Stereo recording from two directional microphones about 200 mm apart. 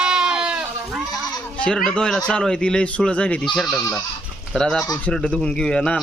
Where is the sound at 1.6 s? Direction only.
5° left (ahead or behind).